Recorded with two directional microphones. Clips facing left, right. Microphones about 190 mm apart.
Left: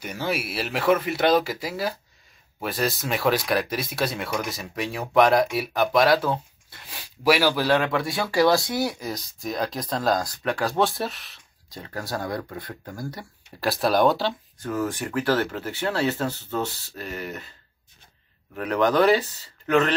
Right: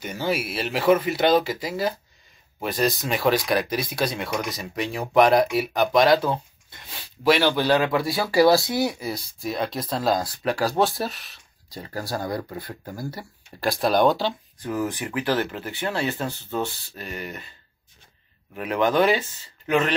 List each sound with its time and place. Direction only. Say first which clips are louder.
0.0 s speech: right 2 dB; centre (ahead or behind)
14.7 s speech: even; 15° right (ahead or behind)
15.0 s speech: left 1 dB; centre (ahead or behind)
18.5 s speech: even; 5° right (ahead or behind)